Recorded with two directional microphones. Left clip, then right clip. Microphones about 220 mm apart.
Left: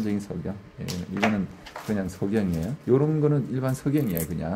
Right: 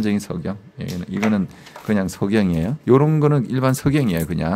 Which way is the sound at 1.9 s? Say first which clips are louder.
Right 8 dB; 40° right (ahead or behind).